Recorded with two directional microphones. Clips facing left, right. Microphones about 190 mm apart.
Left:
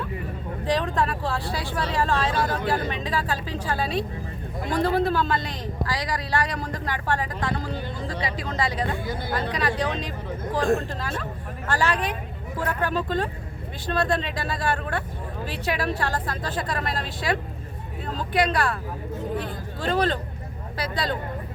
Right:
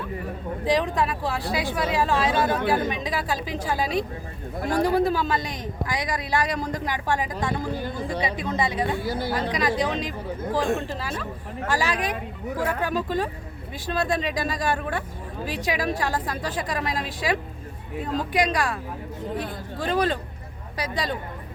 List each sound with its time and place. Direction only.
0.6 s a man's voice: 10° right (ahead or behind)